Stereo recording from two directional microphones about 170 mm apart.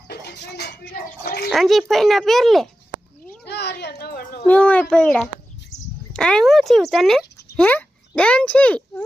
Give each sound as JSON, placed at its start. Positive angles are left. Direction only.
{"t": 0.1, "sound": "speech", "side_deg": 75}
{"t": 1.5, "sound": "speech", "side_deg": 0}
{"t": 3.4, "sound": "speech", "side_deg": 75}
{"t": 4.4, "sound": "speech", "side_deg": 10}